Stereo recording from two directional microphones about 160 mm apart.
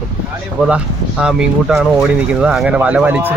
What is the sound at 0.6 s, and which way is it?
Speech, 5° right (ahead or behind).